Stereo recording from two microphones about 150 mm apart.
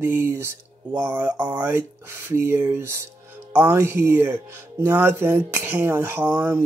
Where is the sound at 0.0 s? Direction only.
15° right (ahead or behind).